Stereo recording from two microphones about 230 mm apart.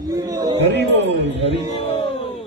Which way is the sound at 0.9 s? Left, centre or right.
Right.